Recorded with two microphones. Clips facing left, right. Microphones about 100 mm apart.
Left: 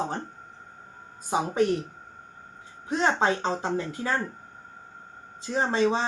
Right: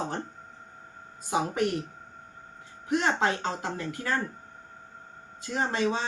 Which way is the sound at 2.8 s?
25° left (ahead or behind).